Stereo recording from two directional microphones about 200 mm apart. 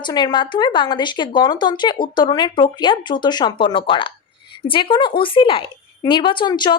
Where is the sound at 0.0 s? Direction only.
20° left (ahead or behind).